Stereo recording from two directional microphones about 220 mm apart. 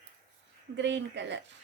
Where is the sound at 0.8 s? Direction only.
50° right (ahead or behind).